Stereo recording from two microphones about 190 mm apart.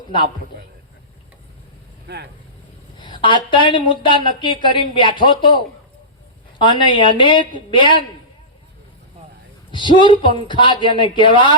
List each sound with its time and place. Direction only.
2.0 s speech: 60° right (ahead or behind)
3.0 s speech: 25° left (ahead or behind)
9.7 s speech: 25° left (ahead or behind)